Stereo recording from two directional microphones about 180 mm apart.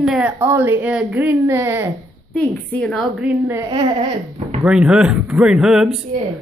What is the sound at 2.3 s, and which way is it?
Speech, 5° left (ahead or behind).